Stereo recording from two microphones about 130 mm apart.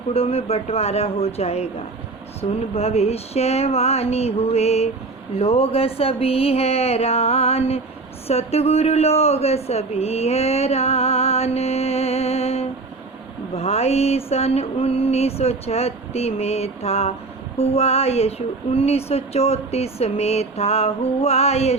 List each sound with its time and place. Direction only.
0.1 s a man's voice: 50° left (ahead or behind)